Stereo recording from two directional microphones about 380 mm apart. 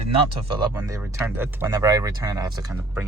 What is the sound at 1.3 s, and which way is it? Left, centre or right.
Speech, centre.